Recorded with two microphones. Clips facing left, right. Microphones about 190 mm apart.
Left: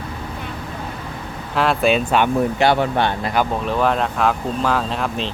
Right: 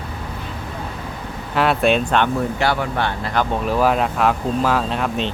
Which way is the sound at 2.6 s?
20° left (ahead or behind).